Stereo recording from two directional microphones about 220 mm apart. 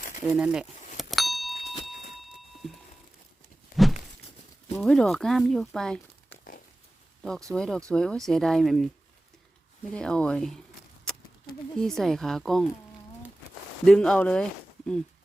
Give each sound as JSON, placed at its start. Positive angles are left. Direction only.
{"t": 0.3, "sound": "speech", "side_deg": -5}
{"t": 0.9, "sound": "vehicle", "side_deg": 0}
{"t": 1.7, "sound": "a sound", "side_deg": 0}
{"t": 3.7, "sound": "a sound", "side_deg": 40}
{"t": 4.8, "sound": "speech", "side_deg": 0}
{"t": 9.9, "sound": "speech", "side_deg": 5}
{"t": 11.8, "sound": "speech", "side_deg": 0}
{"t": 13.8, "sound": "speech", "side_deg": 5}